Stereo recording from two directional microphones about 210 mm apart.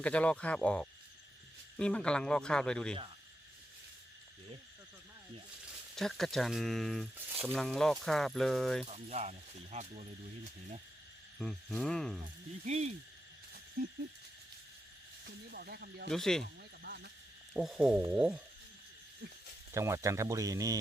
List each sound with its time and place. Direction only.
0.0 s speech: 5° left (ahead or behind)
6.0 s speech: centre (ahead or behind)
8.9 s speech: 35° right (ahead or behind)
11.3 s speech: centre (ahead or behind)
12.6 s speech: 30° right (ahead or behind)
15.2 s speech: 50° right (ahead or behind)
16.0 s speech: centre (ahead or behind)
16.8 s a sound: 50° right (ahead or behind)
17.5 s speech: centre (ahead or behind)
19.7 s speech: 15° right (ahead or behind)